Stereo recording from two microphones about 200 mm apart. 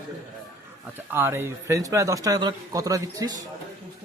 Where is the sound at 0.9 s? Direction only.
10° right (ahead or behind).